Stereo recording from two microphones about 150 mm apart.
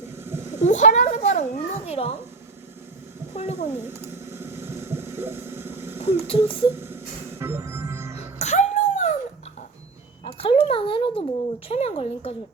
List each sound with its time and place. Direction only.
0.0 s a sound: 15° right (ahead or behind)
0.6 s a child's voice: 50° left (ahead or behind)
3.3 s a woman's voice: 45° left (ahead or behind)
3.7 s a sound: 15° right (ahead or behind)
6.2 s speech: 35° left (ahead or behind)
6.7 s music: 15° right (ahead or behind)
8.4 s music: 50° left (ahead or behind)
10.2 s a sound: 40° left (ahead or behind)
11.7 s a woman's voice: 40° left (ahead or behind)